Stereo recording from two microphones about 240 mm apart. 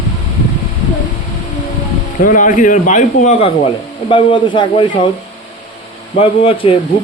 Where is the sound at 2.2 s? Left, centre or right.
Left.